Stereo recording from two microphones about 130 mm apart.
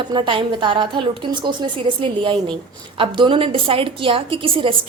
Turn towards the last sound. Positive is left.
turn(degrees=-40)  # may be behind; listen again after turning